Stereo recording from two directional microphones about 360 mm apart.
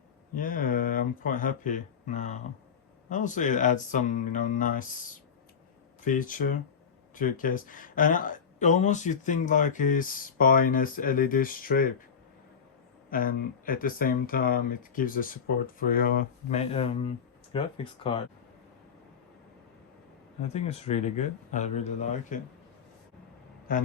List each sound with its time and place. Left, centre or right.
0.3 s speech: left
13.1 s speech: left
20.5 s speech: centre
23.7 s speech: left